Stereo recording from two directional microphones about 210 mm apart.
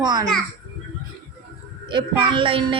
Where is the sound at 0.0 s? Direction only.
20° right (ahead or behind).